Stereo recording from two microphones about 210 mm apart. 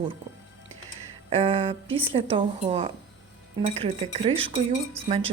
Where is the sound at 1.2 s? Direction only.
30° right (ahead or behind).